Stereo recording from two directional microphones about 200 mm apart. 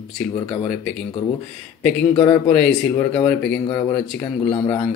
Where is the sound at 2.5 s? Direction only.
5° left (ahead or behind).